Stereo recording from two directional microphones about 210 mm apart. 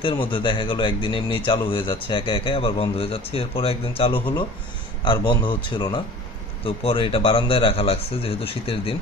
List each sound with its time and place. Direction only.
0.0 s speech: 20° left (ahead or behind)